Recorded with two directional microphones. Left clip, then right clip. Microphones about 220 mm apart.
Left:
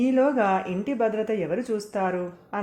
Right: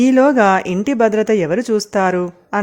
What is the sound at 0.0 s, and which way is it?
Speech, 45° right (ahead or behind).